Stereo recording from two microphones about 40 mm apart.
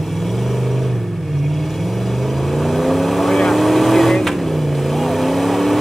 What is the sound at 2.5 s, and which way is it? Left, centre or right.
Vehicle, centre.